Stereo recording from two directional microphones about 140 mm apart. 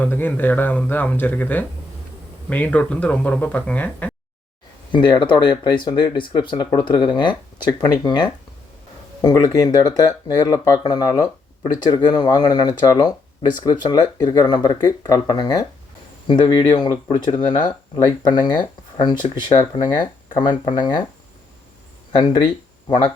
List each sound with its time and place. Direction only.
0.0 s speech: 15° left (ahead or behind)
4.9 s speech: 35° left (ahead or behind)
19.5 s speech: 45° left (ahead or behind)
20.0 s speech: 35° left (ahead or behind)